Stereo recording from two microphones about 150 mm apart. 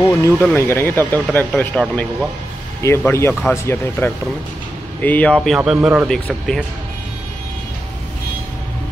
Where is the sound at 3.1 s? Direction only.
15° left (ahead or behind).